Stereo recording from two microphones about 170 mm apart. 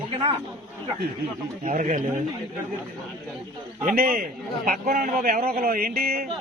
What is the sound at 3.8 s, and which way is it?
A man's voice, 60° right (ahead or behind).